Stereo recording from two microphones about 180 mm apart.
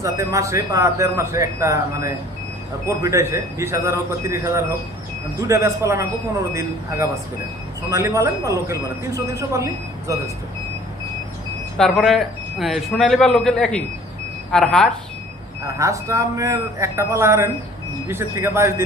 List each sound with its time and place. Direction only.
0.0 s speech: 15° right (ahead or behind)
11.8 s a man's voice: centre (ahead or behind)
15.6 s speech: 15° right (ahead or behind)